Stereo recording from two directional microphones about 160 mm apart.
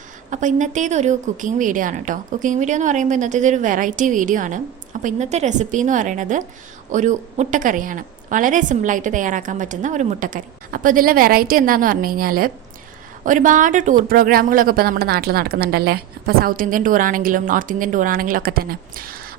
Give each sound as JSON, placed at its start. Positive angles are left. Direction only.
{"t": 0.3, "sound": "a woman's voice", "side_deg": -50}
{"t": 13.2, "sound": "a woman's voice", "side_deg": -55}
{"t": 14.1, "sound": "a woman's voice", "side_deg": -65}